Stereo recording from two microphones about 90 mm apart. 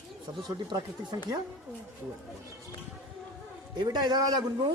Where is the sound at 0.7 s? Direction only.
50° right (ahead or behind).